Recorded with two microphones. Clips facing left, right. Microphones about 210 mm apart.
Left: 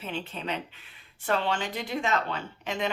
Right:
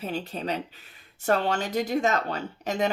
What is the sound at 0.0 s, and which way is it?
A woman's voice, 40° right (ahead or behind).